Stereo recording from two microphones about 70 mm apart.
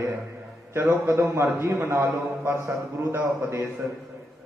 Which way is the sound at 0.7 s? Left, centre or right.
Right.